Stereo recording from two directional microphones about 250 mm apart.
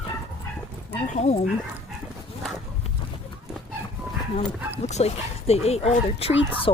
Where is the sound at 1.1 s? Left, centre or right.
Left.